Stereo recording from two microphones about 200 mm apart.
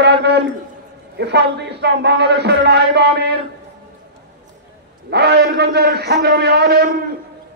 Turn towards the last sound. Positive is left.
turn(degrees=-50)  # may be behind; listen again after turning